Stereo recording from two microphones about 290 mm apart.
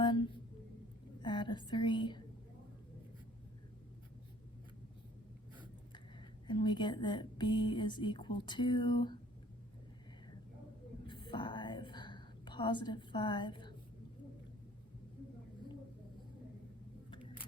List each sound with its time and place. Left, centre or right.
0.0 s a sound: centre
1.2 s a woman's voice: centre
6.5 s speech: centre
11.0 s whispering: centre